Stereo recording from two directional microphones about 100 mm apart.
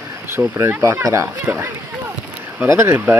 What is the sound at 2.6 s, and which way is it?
Speech, 25° right (ahead or behind).